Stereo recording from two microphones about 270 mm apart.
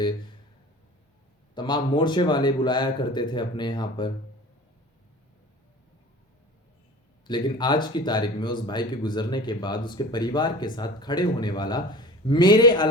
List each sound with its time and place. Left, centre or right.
1.5 s speech: centre
7.3 s speech: centre